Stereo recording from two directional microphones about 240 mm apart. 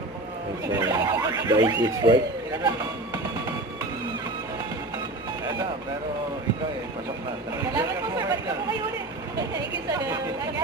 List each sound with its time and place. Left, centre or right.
0.7 s speech: centre
7.7 s speech: centre